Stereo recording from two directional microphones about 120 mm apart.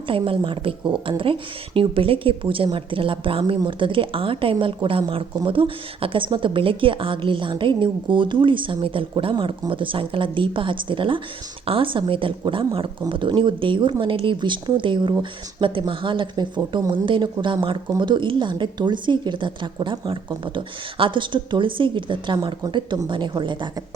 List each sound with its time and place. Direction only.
0.1 s a woman's voice: 45° right (ahead or behind)